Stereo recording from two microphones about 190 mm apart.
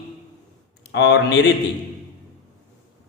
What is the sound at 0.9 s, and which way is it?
Speech, 65° left (ahead or behind).